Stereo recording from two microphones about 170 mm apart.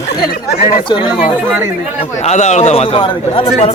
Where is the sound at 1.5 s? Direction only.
15° right (ahead or behind).